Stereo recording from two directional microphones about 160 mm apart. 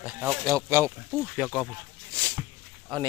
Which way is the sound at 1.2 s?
5° right (ahead or behind).